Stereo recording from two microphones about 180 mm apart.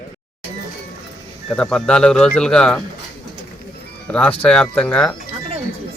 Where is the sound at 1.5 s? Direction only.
5° left (ahead or behind).